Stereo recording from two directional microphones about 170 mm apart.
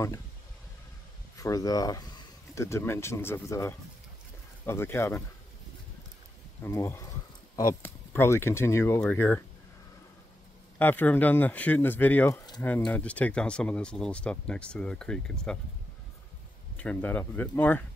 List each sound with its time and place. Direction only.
1.3 s speech: 20° left (ahead or behind)
6.6 s speech: 15° left (ahead or behind)
10.8 s speech: 10° left (ahead or behind)
16.7 s speech: 10° left (ahead or behind)